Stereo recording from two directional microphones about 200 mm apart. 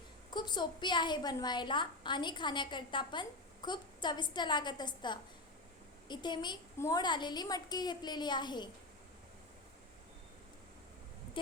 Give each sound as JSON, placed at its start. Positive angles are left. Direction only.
{"t": 0.3, "sound": "a woman's voice", "side_deg": 20}